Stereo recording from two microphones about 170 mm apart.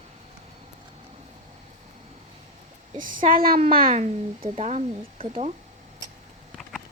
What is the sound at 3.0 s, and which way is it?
Speech, 55° right (ahead or behind).